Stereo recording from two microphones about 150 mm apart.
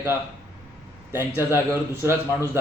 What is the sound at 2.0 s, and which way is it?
Speech, 15° right (ahead or behind).